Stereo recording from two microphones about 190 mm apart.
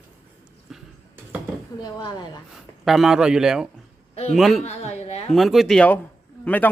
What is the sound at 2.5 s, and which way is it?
A man's voice, centre (ahead or behind).